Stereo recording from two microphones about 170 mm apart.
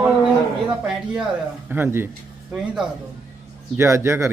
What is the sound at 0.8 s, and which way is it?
Speech, 5° right (ahead or behind).